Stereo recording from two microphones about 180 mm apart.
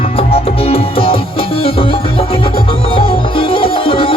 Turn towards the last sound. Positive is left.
turn(degrees=30)  # may be behind; listen again after turning